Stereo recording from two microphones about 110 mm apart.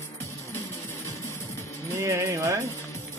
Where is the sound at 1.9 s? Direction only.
30° right (ahead or behind).